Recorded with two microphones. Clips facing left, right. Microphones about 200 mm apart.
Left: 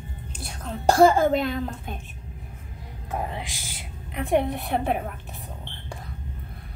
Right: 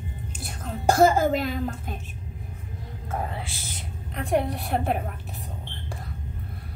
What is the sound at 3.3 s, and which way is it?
A woman's voice, 15° left (ahead or behind).